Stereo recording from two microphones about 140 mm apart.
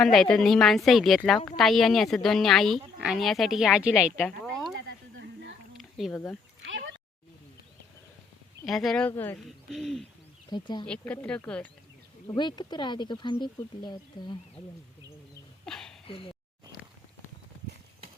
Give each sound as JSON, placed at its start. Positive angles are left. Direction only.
{"t": 0.0, "sound": "a woman's voice", "side_deg": 5}
{"t": 5.7, "sound": "a sound", "side_deg": 0}
{"t": 8.6, "sound": "speech", "side_deg": 0}
{"t": 9.6, "sound": "a woman's voice", "side_deg": 0}
{"t": 10.5, "sound": "speech", "side_deg": 30}
{"t": 10.8, "sound": "speech", "side_deg": 10}
{"t": 12.4, "sound": "speech", "side_deg": 30}
{"t": 15.6, "sound": "a sound", "side_deg": 5}
{"t": 16.0, "sound": "speech", "side_deg": 40}